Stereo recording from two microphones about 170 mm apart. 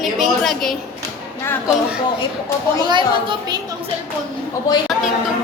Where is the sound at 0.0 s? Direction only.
Centre (ahead or behind).